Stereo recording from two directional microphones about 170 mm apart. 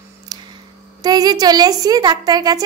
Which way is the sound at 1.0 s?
20° right (ahead or behind).